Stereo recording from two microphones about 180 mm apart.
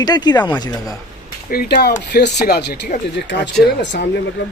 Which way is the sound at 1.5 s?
60° left (ahead or behind).